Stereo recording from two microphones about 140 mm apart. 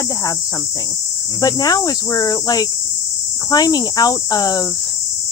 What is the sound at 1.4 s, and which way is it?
Speech, 25° left (ahead or behind).